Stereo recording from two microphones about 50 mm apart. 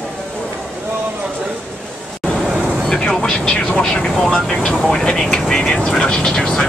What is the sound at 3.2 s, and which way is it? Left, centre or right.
Vehicle, centre.